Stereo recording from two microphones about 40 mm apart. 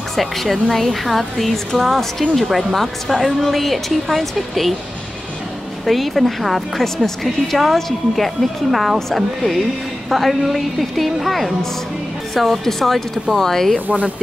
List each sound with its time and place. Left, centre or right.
0.1 s speech: centre
5.9 s speech: centre
13.8 s speech: right